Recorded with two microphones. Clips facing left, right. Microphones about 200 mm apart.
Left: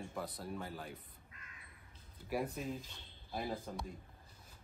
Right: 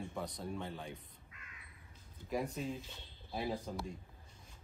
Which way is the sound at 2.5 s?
Centre (ahead or behind).